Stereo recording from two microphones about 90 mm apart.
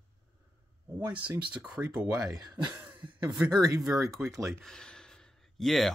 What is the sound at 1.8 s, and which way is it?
Speech, 15° right (ahead or behind).